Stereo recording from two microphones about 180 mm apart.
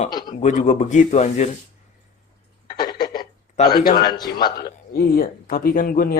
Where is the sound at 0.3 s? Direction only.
40° left (ahead or behind).